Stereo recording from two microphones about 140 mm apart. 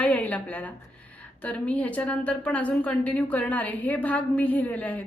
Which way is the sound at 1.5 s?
10° left (ahead or behind).